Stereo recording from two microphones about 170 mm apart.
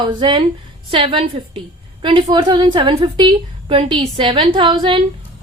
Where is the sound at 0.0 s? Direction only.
30° right (ahead or behind).